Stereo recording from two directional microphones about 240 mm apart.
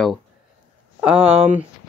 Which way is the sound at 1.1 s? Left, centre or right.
Right.